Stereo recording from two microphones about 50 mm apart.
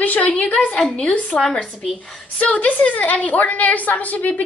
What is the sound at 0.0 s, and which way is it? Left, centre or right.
A woman's voice, left.